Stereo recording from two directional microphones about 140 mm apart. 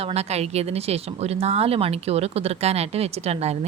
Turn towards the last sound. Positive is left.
turn(degrees=-50)  # may be behind; listen again after turning